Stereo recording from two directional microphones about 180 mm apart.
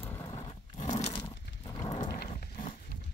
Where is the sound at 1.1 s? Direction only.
25° left (ahead or behind).